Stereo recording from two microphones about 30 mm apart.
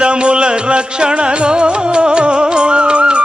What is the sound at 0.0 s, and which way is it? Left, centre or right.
Music, right.